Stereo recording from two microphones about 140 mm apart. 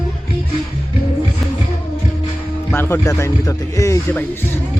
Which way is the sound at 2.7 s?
15° left (ahead or behind).